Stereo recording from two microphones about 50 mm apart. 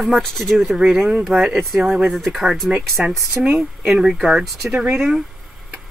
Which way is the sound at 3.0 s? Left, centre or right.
Right.